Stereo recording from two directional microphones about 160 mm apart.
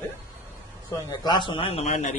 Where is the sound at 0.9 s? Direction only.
25° left (ahead or behind); by 2.1 s 45° left (ahead or behind).